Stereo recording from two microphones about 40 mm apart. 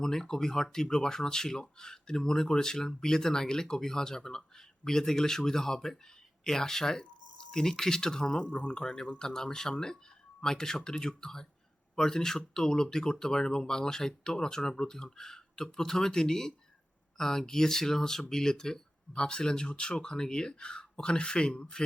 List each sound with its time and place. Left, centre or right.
0.0 s speech: centre
8.4 s speech: left
8.8 s speech: centre